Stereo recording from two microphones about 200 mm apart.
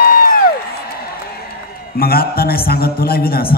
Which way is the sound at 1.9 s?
50° left (ahead or behind).